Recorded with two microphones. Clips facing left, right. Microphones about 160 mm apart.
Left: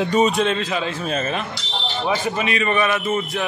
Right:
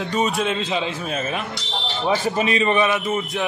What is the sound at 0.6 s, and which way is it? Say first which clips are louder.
Speech: even; 20° right (ahead or behind).